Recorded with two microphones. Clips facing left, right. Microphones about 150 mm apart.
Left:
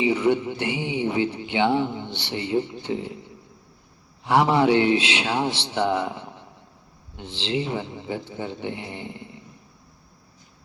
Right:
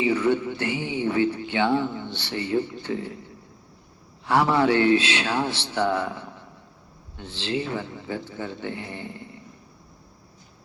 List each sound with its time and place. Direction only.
0.0 s speech: 15° left (ahead or behind)